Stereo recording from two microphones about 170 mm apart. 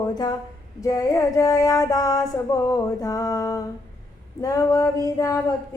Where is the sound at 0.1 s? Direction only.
25° left (ahead or behind).